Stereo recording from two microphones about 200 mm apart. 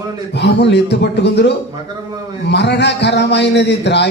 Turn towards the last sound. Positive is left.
turn(degrees=60)  # may be behind; listen again after turning